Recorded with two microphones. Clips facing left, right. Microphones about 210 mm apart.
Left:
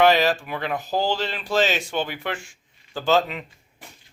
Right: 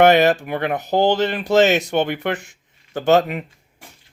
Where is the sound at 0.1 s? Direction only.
60° right (ahead or behind).